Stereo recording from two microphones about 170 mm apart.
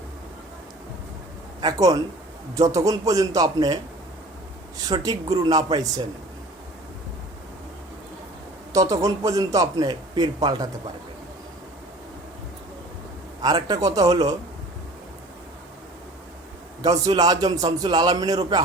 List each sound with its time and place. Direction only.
1.6 s a man's voice: 20° right (ahead or behind)
4.9 s a man's voice: 20° right (ahead or behind)
8.7 s a man's voice: 20° right (ahead or behind)
13.4 s a man's voice: 25° right (ahead or behind)
16.8 s a man's voice: 25° right (ahead or behind)